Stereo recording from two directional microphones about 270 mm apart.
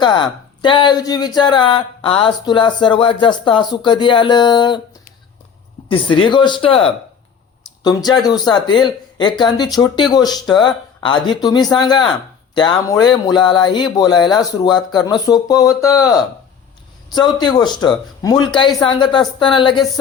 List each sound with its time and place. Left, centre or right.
0.0 s speech: centre
5.9 s speech: centre